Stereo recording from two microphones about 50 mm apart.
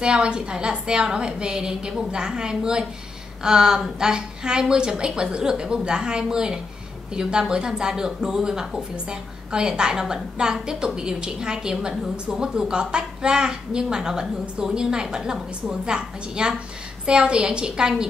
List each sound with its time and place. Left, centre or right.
0.0 s a woman's voice: centre